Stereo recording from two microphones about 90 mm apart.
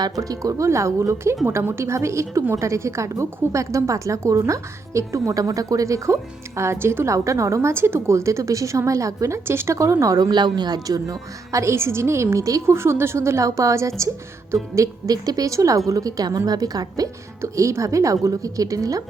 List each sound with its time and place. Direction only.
0.0 s a woman's voice: 40° right (ahead or behind)